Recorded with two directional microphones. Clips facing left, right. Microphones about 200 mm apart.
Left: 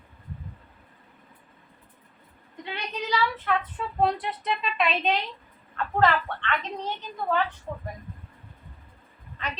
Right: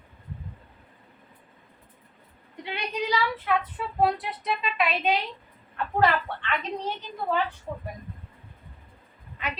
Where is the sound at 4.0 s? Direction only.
5° right (ahead or behind).